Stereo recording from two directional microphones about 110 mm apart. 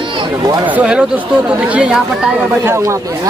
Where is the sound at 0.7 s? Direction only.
10° right (ahead or behind).